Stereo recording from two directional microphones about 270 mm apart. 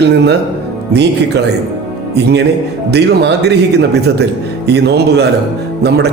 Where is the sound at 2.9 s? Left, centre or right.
Right.